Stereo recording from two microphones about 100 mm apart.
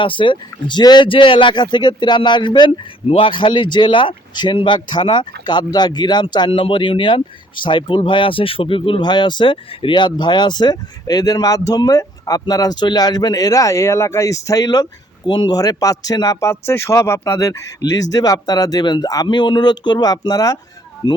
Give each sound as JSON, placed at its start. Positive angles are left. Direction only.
{"t": 0.0, "sound": "speech", "side_deg": 55}
{"t": 6.5, "sound": "speech", "side_deg": 60}
{"t": 15.5, "sound": "speech", "side_deg": 35}